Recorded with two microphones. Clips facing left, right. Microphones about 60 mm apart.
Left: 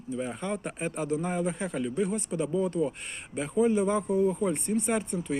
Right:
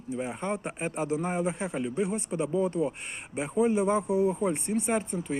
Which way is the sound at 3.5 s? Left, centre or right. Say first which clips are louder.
Even; centre.